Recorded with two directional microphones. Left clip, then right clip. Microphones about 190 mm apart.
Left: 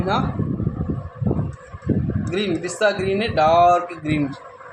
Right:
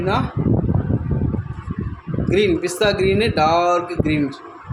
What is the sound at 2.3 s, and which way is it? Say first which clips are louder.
Speech: right 7 dB; 45° right (ahead or behind).